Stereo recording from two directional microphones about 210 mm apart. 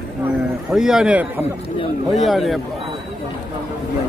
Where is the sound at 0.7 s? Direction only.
5° right (ahead or behind).